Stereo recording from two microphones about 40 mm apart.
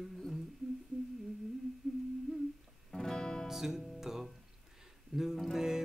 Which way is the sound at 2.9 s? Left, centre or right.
Centre.